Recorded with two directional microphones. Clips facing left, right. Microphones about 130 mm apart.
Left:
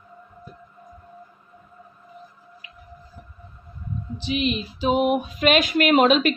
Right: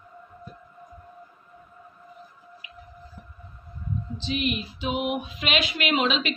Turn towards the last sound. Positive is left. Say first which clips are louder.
# left 8 dB
turn(degrees=45)  # may be behind; listen again after turning